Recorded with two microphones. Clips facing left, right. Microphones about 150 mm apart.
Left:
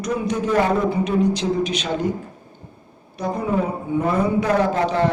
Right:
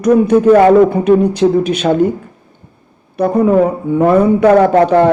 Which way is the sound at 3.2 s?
60° right (ahead or behind).